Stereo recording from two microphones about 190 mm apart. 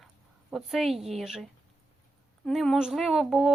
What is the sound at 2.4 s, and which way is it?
Speech, centre (ahead or behind).